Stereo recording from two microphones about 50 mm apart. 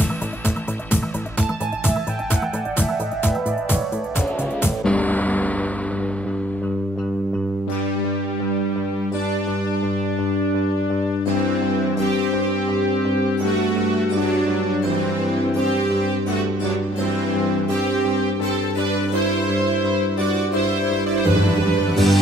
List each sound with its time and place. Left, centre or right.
4.8 s music: left
21.9 s music: centre